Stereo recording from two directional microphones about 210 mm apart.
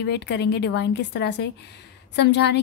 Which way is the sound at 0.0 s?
55° left (ahead or behind).